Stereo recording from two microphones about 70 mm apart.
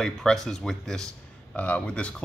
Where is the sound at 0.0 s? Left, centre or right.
Centre.